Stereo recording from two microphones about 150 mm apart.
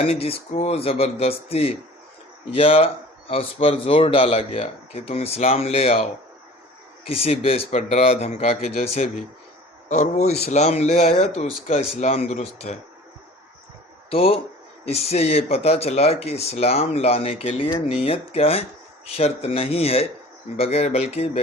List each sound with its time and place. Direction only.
0.0 s speech: 40° left (ahead or behind)
7.1 s speech: 40° left (ahead or behind)
14.1 s speech: 40° left (ahead or behind)